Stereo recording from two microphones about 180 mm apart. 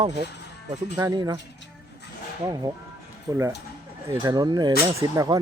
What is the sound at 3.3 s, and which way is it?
Speech, 15° right (ahead or behind).